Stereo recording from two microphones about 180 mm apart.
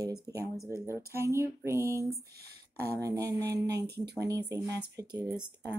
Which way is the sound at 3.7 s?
65° right (ahead or behind).